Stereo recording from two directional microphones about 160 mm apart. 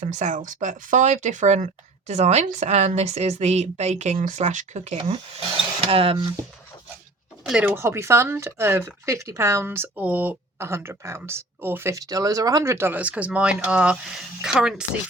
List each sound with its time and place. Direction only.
0.0 s speech: 50° right (ahead or behind)
7.4 s speech: 5° right (ahead or behind)
7.7 s speech: 15° right (ahead or behind)